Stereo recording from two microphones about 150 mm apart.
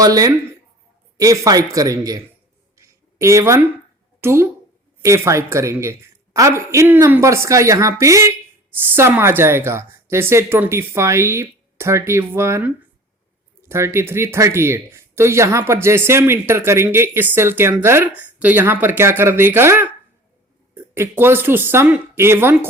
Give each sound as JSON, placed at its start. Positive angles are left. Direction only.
{"t": 0.0, "sound": "speech", "side_deg": -25}
{"t": 2.7, "sound": "a sound", "side_deg": -20}
{"t": 4.2, "sound": "speech", "side_deg": -15}